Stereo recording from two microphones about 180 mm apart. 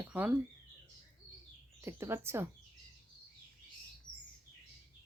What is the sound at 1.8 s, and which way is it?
Speech, 15° right (ahead or behind).